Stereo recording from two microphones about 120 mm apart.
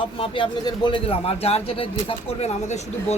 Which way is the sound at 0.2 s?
45° left (ahead or behind).